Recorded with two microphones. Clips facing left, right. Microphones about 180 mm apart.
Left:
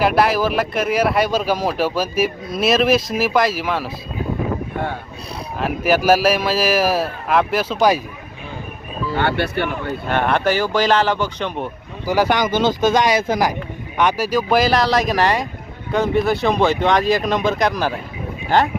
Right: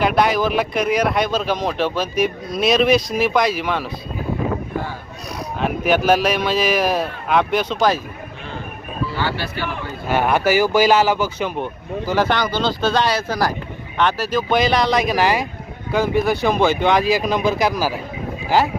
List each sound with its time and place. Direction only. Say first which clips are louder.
0.0 s speech: left 1 dB; 5° left (ahead or behind)
5.5 s speech: left 1 dB; centre (ahead or behind)
9.1 s speech: left 8 dB; 60° left (ahead or behind)
10.1 s speech: right 1 dB; 5° right (ahead or behind)
12.0 s speech: left 2 dB; 10° left (ahead or behind); by 18.7 s 5° right (ahead or behind)